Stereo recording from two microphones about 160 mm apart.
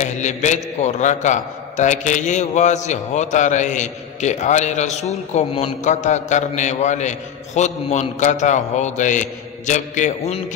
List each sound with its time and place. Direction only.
0.0 s a man's voice: 50° left (ahead or behind)